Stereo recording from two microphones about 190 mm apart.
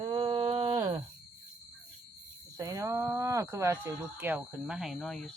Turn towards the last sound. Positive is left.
turn(degrees=0)  # may be behind; listen again after turning